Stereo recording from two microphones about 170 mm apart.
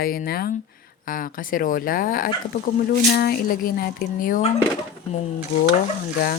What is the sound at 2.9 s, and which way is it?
A woman's voice, 70° left (ahead or behind).